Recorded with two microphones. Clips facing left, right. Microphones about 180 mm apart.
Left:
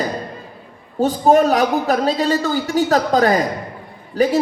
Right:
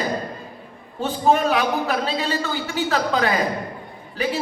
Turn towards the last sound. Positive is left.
turn(degrees=40)  # may be behind; listen again after turning